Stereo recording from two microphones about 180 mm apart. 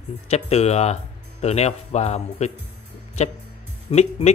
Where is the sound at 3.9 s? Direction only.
40° left (ahead or behind).